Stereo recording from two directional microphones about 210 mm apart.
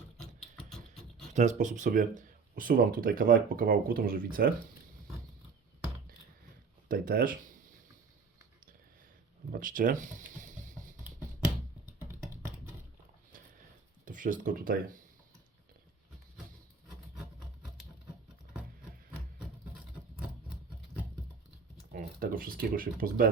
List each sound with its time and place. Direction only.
0.2 s typing: centre (ahead or behind)
1.3 s speech: 35° right (ahead or behind)
6.8 s speech: 45° right (ahead or behind)
9.5 s a sound: 40° right (ahead or behind)
14.0 s speech: 40° right (ahead or behind)
21.9 s speech: 40° right (ahead or behind)